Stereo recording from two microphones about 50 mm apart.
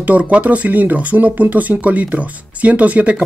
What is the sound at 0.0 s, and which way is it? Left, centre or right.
Speech, right.